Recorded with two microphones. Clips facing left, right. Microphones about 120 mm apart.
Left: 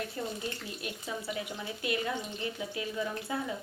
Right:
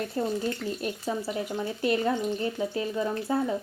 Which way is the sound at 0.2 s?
35° right (ahead or behind).